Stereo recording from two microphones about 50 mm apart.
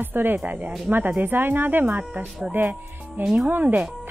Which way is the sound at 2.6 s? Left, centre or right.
Right.